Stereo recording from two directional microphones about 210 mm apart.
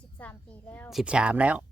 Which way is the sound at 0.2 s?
5° left (ahead or behind).